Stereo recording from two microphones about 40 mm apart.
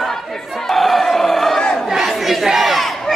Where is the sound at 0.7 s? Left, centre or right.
Centre.